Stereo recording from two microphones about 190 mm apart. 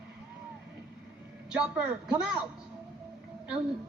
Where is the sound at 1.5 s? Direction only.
5° right (ahead or behind).